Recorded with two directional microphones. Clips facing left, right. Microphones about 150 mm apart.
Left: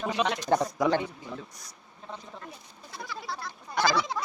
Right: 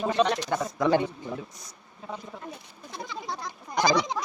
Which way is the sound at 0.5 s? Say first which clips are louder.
Left 4 dB; 30° left (ahead or behind).